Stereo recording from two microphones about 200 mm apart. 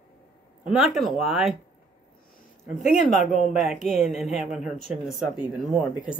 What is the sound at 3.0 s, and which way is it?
Speech, 40° left (ahead or behind).